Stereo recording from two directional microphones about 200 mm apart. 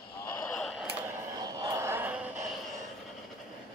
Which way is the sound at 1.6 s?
15° right (ahead or behind).